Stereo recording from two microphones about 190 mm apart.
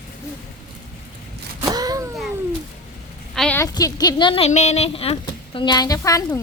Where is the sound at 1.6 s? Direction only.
20° right (ahead or behind).